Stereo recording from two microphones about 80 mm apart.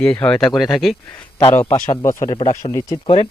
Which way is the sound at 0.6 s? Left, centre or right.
Centre.